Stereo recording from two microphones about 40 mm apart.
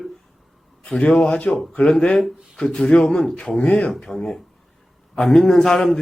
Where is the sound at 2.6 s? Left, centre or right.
Centre.